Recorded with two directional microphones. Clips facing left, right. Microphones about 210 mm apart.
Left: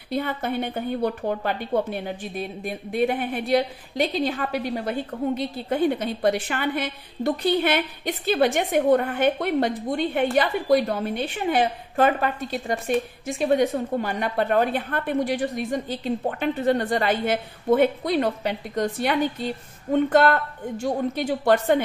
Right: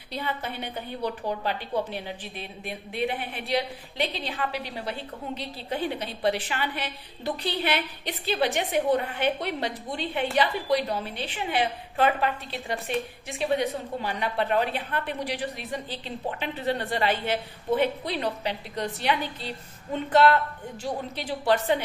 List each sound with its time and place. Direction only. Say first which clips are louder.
0.1 s a woman's voice: left 7 dB; 50° left (ahead or behind)